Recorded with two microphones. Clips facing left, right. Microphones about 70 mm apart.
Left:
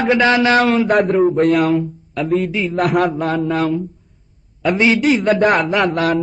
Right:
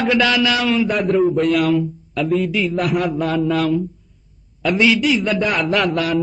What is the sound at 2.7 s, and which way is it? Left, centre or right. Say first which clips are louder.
Mantra: left 7 dB; left.